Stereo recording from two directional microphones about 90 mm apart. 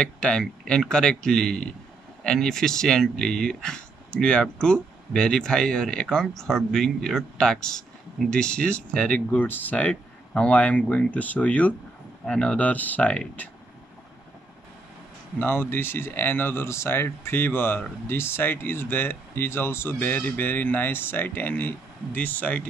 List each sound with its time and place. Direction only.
0.0 s speech: 10° left (ahead or behind)
15.3 s a man's voice: 25° left (ahead or behind)